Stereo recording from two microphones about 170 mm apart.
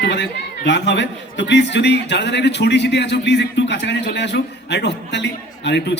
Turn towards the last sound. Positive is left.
turn(degrees=90)